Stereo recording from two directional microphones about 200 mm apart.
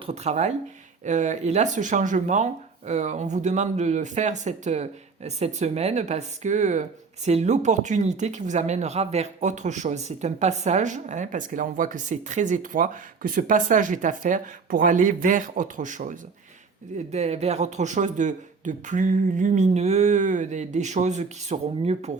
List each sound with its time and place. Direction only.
0.0 s speech: 30° right (ahead or behind)